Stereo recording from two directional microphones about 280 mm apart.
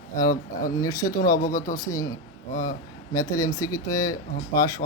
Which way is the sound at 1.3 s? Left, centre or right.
Left.